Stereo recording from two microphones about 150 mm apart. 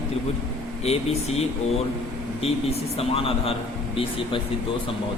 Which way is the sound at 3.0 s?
40° left (ahead or behind).